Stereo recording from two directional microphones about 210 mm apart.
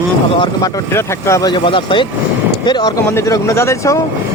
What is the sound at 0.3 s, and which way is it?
Speech, 20° left (ahead or behind).